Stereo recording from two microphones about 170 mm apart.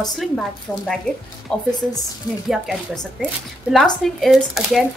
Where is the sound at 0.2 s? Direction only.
Centre (ahead or behind).